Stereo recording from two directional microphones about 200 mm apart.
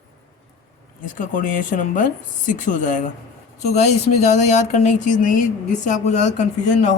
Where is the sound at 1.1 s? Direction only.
40° left (ahead or behind).